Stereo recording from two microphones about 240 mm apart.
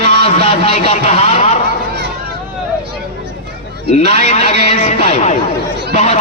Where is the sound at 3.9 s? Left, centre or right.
Left.